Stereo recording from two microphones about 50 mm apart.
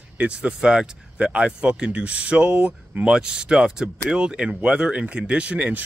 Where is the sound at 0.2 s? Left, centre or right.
Right.